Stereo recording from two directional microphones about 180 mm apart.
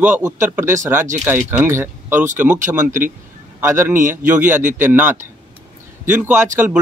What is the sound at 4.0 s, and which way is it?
Speech, 45° right (ahead or behind).